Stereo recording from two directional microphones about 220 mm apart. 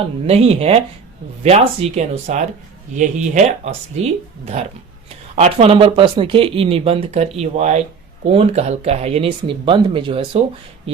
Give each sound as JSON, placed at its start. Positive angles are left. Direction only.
{"t": 0.3, "sound": "speech", "side_deg": -25}